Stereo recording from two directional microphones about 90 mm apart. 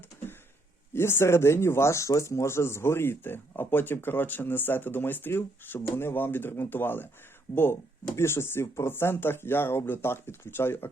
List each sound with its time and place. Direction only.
0.9 s speech: 25° left (ahead or behind)